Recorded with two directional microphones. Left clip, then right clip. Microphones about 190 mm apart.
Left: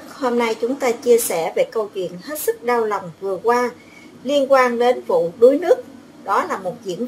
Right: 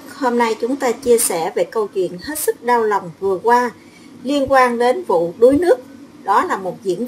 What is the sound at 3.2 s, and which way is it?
Speech, centre (ahead or behind).